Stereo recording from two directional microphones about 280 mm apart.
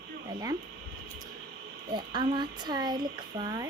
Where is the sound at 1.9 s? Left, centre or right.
Centre.